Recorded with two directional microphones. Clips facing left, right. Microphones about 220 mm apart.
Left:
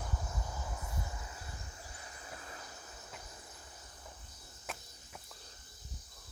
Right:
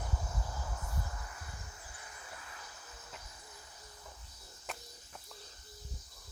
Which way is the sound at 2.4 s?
35° left (ahead or behind).